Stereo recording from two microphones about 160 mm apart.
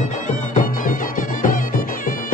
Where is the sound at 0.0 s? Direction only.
50° left (ahead or behind).